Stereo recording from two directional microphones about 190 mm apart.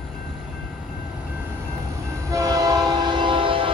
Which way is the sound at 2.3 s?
15° right (ahead or behind).